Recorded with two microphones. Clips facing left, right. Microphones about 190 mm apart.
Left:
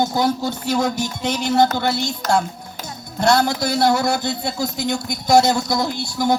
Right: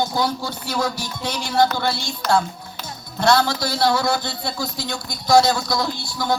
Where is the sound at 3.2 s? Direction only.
20° left (ahead or behind).